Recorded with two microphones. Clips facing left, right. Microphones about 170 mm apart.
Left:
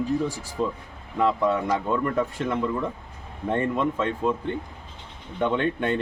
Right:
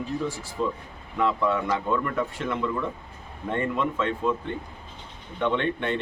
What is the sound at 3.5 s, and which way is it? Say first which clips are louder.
Speech: left 2 dB; 35° left (ahead or behind).